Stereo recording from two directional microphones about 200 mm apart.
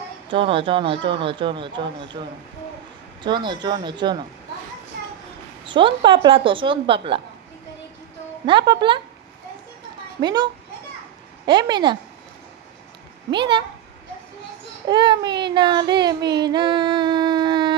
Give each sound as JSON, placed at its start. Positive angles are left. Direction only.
{"t": 0.3, "sound": "speech", "side_deg": -25}
{"t": 3.2, "sound": "speech", "side_deg": -20}
{"t": 5.6, "sound": "speech", "side_deg": -25}
{"t": 8.4, "sound": "speech", "side_deg": -25}
{"t": 10.2, "sound": "speech", "side_deg": -20}
{"t": 13.3, "sound": "speech", "side_deg": -25}
{"t": 14.8, "sound": "child singing", "side_deg": -25}